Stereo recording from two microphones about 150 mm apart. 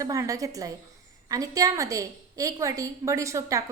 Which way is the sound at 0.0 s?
20° right (ahead or behind).